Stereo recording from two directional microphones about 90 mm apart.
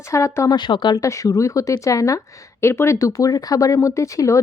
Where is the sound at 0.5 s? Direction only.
60° left (ahead or behind).